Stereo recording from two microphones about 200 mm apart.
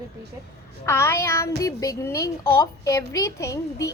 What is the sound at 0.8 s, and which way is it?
A woman's voice, 15° left (ahead or behind).